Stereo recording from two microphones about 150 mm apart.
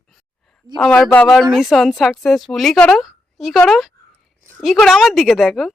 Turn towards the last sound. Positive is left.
turn(degrees=0)  # may be behind; listen again after turning